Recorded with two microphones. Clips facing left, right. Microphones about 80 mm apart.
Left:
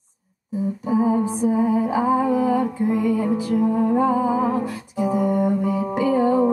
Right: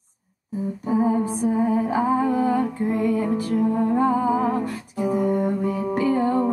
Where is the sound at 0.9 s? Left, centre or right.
Centre.